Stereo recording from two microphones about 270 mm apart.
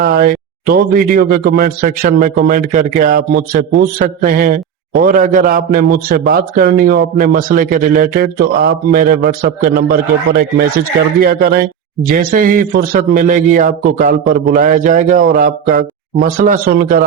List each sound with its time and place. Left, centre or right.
0.0 s speech: right
11.2 s speech: right